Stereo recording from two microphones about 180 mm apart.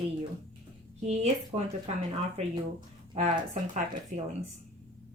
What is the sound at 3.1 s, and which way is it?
Speech, 45° right (ahead or behind).